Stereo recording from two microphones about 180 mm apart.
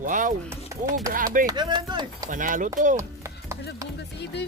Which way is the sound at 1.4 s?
25° right (ahead or behind).